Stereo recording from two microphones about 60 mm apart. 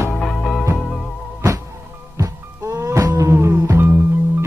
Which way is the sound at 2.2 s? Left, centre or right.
Right.